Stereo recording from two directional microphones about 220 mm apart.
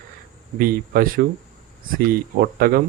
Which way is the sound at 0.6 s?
40° right (ahead or behind).